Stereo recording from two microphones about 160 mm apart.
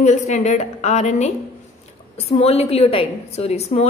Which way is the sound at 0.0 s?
45° left (ahead or behind).